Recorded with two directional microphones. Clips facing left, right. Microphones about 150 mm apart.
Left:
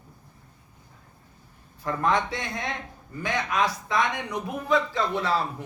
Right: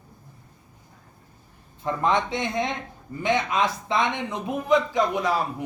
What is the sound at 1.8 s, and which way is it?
A man's voice, 20° right (ahead or behind).